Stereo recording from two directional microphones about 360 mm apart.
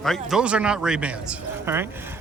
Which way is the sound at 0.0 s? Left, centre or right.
Centre.